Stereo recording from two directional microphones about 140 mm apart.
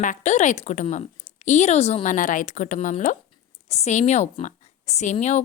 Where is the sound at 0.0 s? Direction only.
60° left (ahead or behind).